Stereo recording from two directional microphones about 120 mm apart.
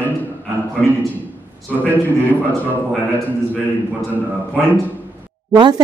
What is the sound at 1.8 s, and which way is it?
Speech, 15° left (ahead or behind).